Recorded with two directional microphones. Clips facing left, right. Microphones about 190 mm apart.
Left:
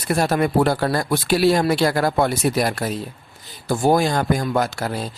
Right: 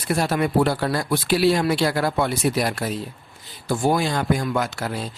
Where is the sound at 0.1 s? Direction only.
45° left (ahead or behind).